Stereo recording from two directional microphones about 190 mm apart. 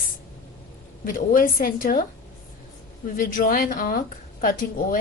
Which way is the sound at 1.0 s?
45° left (ahead or behind).